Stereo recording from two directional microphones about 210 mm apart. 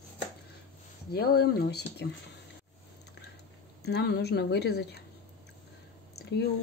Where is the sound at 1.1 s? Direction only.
50° left (ahead or behind).